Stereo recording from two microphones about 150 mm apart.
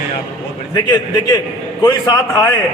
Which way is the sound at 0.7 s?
25° left (ahead or behind).